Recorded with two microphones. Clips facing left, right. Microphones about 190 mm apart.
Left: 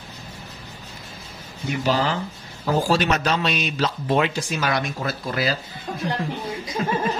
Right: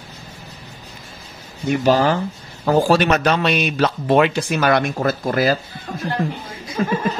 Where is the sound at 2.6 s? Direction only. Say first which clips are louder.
Right 5 dB; 60° right (ahead or behind).